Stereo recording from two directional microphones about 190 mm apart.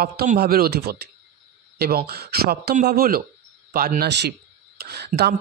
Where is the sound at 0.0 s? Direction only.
50° right (ahead or behind).